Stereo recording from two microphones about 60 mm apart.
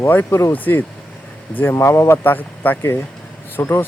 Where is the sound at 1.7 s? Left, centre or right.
Left.